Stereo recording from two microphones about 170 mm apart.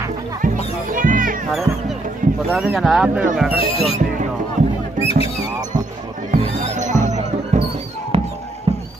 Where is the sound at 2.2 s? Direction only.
50° right (ahead or behind).